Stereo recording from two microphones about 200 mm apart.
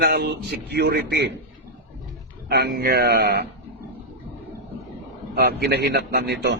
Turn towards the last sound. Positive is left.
turn(degrees=-55)  # may be behind; listen again after turning